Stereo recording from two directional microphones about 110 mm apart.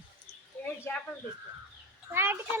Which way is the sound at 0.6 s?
20° left (ahead or behind).